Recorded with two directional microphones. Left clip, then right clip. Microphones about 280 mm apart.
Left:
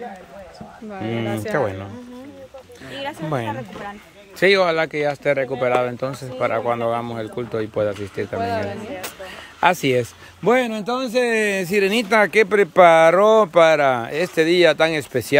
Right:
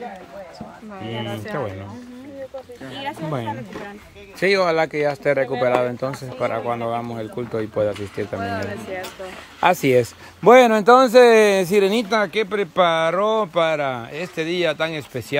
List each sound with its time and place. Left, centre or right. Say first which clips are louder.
0.9 s speech: left 4 dB; left
2.9 s speech: left 2 dB; centre
9.6 s speech: right 1 dB; centre